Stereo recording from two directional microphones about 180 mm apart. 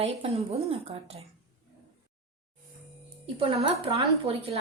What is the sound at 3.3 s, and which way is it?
A woman's voice, 30° right (ahead or behind).